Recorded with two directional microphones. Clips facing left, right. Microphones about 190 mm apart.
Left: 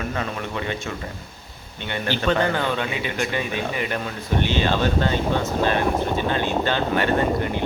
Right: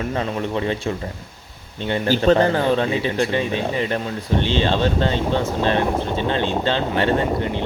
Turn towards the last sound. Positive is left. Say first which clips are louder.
# right 1 dB
turn(degrees=-25)  # may be behind; listen again after turning